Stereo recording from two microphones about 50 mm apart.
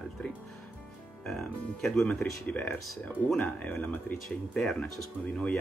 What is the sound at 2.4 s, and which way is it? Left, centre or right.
Speech, left.